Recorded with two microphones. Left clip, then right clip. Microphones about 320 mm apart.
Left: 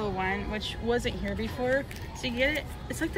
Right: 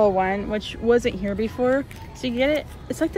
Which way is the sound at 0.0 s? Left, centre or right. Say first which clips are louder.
Right 11 dB; centre.